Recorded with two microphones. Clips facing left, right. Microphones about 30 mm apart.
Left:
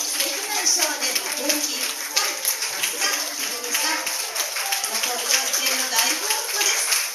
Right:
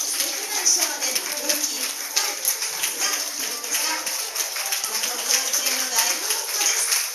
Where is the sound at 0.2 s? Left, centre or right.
Centre.